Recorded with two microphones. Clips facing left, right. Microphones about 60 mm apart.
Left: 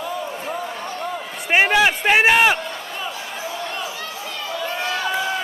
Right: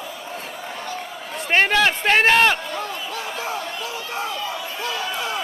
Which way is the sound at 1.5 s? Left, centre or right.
Centre.